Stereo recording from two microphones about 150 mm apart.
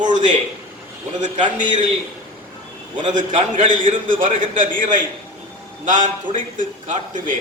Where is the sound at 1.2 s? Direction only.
55° right (ahead or behind).